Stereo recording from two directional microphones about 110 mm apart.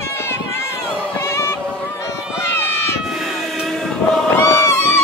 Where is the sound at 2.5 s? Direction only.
20° left (ahead or behind).